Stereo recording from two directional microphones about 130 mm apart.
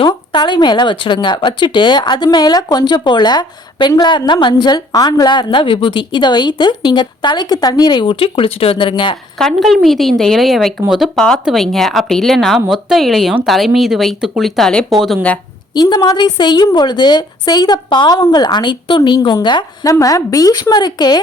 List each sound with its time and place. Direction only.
0.0 s speech: 35° left (ahead or behind)
9.4 s speech: 5° left (ahead or behind)
15.7 s speech: 30° left (ahead or behind)